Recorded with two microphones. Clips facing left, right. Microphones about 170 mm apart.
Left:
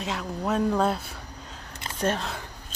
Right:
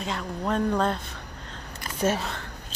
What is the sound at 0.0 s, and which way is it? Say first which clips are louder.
Speech: even; 5° left (ahead or behind).